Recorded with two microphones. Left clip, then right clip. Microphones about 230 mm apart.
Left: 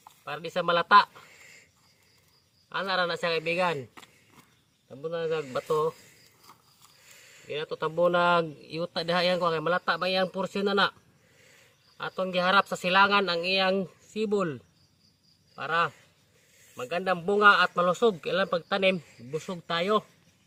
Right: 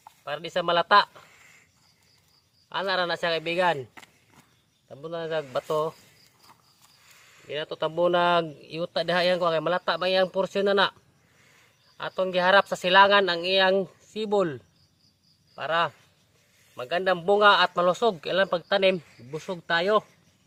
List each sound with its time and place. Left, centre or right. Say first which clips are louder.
0.3 s speech: right 2 dB; right
1.3 s a sound: left 2 dB; centre
2.6 s speech: right 2 dB; right
5.0 s speech: even; right
7.2 s a sound: left 2 dB; centre
7.4 s speech: right 2 dB; right
11.9 s speech: right 3 dB; right; by 20.1 s centre